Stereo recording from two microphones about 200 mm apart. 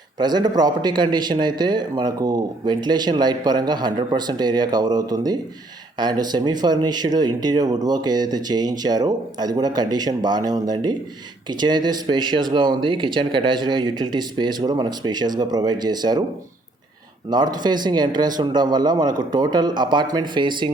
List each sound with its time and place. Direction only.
0.2 s a man's voice: 20° right (ahead or behind)
17.2 s a man's voice: 20° right (ahead or behind)